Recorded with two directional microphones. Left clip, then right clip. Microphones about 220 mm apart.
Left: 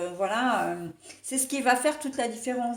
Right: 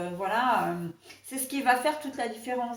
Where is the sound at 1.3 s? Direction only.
45° left (ahead or behind).